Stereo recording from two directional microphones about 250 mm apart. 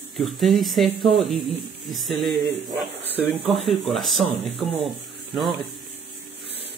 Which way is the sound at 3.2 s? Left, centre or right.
Centre.